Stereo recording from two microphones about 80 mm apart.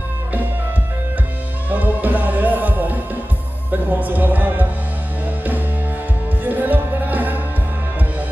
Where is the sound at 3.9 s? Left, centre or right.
Right.